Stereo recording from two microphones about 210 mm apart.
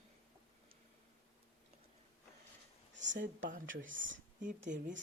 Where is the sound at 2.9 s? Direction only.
60° right (ahead or behind).